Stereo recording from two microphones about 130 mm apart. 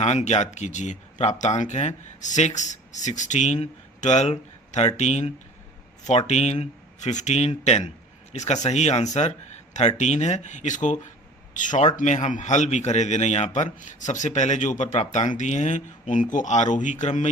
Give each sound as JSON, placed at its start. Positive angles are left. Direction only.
{"t": 0.0, "sound": "speech", "side_deg": 55}
{"t": 11.9, "sound": "speech", "side_deg": 65}
{"t": 13.7, "sound": "speech", "side_deg": 75}